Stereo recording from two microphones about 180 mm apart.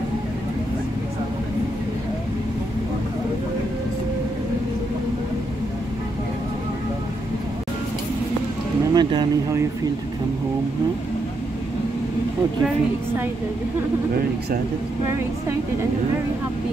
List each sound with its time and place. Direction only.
8.9 s speech: 25° right (ahead or behind)